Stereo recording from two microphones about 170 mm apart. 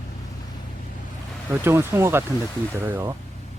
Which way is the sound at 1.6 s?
15° right (ahead or behind).